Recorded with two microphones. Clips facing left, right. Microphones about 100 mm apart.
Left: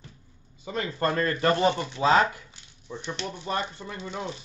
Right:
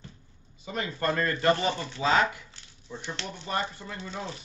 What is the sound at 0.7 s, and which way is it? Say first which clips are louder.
A man's voice: left 2 dB; 30° left (ahead or behind).